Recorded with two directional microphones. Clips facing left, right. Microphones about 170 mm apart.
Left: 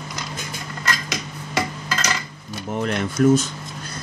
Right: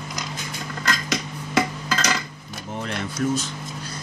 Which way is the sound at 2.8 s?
50° left (ahead or behind).